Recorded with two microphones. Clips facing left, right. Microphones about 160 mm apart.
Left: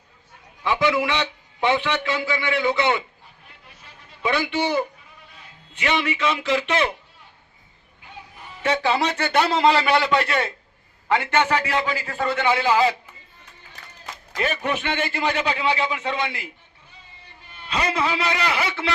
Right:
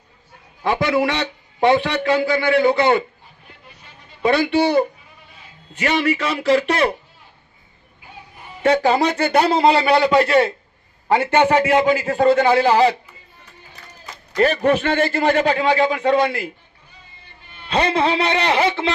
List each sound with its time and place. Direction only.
0.6 s a man's voice: 45° right (ahead or behind)
3.4 s a sound: centre (ahead or behind)
4.2 s a man's voice: 40° right (ahead or behind)
8.6 s a man's voice: 40° right (ahead or behind)
14.3 s a man's voice: 40° right (ahead or behind)
17.7 s a man's voice: 30° right (ahead or behind)